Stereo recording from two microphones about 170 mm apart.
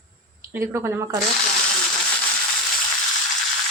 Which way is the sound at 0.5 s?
15° right (ahead or behind).